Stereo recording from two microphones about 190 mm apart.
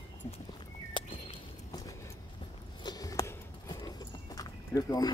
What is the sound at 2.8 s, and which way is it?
Horse, 20° left (ahead or behind).